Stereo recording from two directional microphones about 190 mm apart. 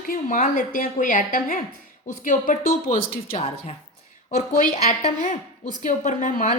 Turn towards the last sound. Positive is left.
turn(degrees=40)  # may be behind; listen again after turning